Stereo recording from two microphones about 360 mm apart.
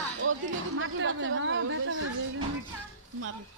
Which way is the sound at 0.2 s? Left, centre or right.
Right.